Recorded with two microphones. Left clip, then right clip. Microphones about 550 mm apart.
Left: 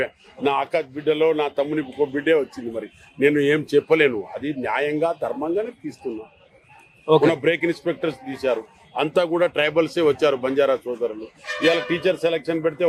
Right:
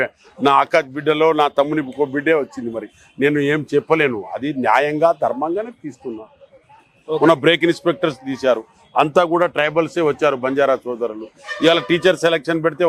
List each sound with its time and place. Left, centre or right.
0.0 s a man's voice: right
7.2 s a man's voice: right
11.6 s a man's voice: right